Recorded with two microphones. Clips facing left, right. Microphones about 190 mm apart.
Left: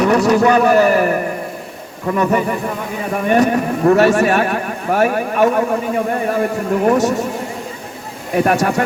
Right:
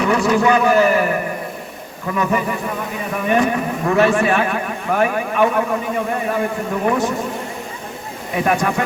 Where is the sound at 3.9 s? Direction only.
40° left (ahead or behind).